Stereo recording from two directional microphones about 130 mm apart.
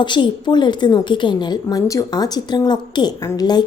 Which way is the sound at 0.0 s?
35° left (ahead or behind).